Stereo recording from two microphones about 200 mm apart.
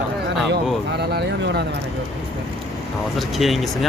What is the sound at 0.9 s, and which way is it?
Speech, 55° right (ahead or behind).